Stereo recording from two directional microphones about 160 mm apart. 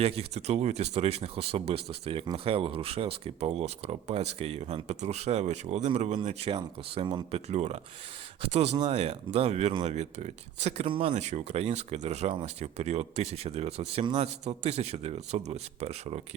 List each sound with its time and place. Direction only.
0.0 s speech: 40° right (ahead or behind)